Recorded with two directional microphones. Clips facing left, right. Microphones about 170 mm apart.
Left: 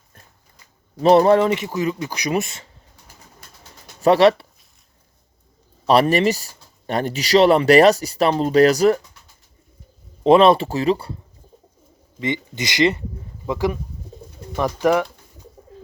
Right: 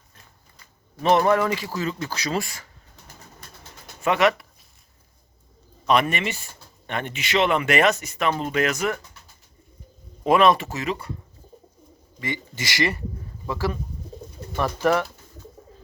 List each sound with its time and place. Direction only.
1.0 s a man's voice: 35° left (ahead or behind)
4.0 s speech: 35° left (ahead or behind)
5.8 s speech: 35° left (ahead or behind)
10.2 s speech: 30° left (ahead or behind)
12.2 s a man's voice: 20° left (ahead or behind)